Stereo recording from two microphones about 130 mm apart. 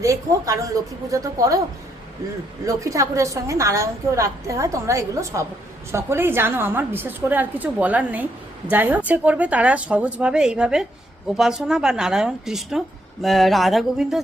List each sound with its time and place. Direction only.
0.0 s a woman's voice: 25° right (ahead or behind)
2.6 s a woman's voice: 25° right (ahead or behind); by 14.2 s 5° right (ahead or behind)